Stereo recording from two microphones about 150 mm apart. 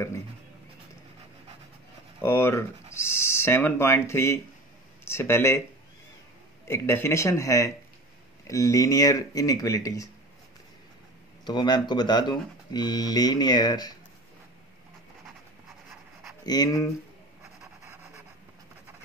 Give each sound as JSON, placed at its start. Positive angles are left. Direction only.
{"t": 2.2, "sound": "speech", "side_deg": 15}
{"t": 6.7, "sound": "speech", "side_deg": 15}
{"t": 11.4, "sound": "speech", "side_deg": 30}
{"t": 16.4, "sound": "speech", "side_deg": 25}